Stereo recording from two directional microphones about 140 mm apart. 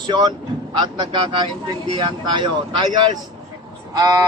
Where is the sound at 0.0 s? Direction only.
35° right (ahead or behind).